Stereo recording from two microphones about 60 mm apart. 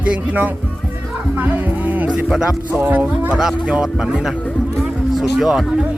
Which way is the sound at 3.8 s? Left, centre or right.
Centre.